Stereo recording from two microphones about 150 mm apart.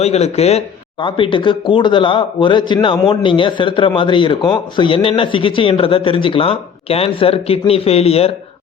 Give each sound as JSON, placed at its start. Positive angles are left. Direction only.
{"t": 0.0, "sound": "speech", "side_deg": 45}